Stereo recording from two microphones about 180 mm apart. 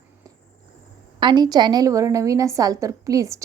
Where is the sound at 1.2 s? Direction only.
25° right (ahead or behind).